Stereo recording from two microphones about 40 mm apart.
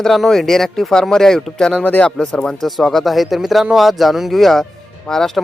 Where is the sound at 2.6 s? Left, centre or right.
Centre.